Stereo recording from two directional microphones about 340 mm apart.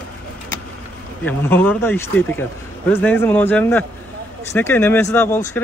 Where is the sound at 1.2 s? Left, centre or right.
Centre.